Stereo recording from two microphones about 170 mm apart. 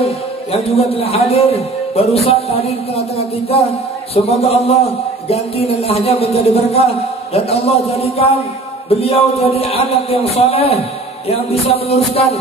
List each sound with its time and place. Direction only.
0.0 s a man's voice: 35° left (ahead or behind)